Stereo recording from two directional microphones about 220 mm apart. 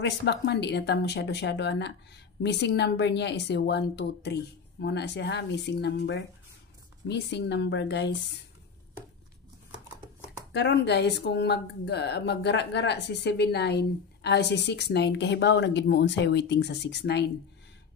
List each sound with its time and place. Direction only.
0.0 s speech: 50° left (ahead or behind)
10.5 s speech: 50° left (ahead or behind)